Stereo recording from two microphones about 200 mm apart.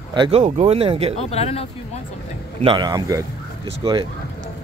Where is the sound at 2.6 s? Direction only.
25° right (ahead or behind).